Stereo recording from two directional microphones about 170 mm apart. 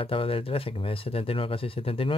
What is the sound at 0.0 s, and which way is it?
Speech, 30° left (ahead or behind).